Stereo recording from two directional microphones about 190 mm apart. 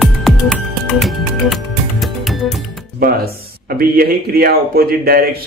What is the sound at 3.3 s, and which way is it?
Speech, 50° right (ahead or behind).